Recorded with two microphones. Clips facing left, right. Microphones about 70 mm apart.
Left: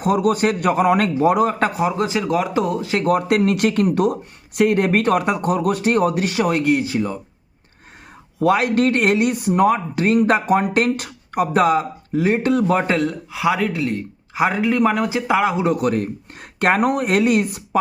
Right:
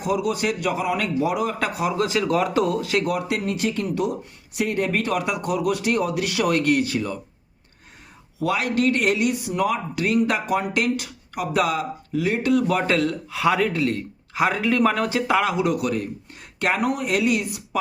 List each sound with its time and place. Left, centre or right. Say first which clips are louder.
0.0 s speech: left 6 dB; left; by 2.6 s centre
2.6 s speech: left 1 dB; left
3.1 s speech: left 8 dB; left
8.4 s speech: left 6 dB; left
13.0 s speech: left 1 dB; centre
13.4 s speech: left 1 dB; centre
14.3 s speech: left 3 dB; centre; by 17.6 s left